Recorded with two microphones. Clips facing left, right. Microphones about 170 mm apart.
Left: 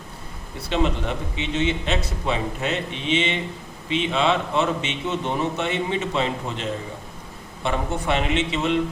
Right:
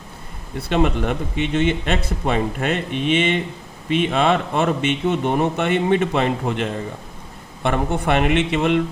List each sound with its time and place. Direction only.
0.7 s speech: 55° right (ahead or behind)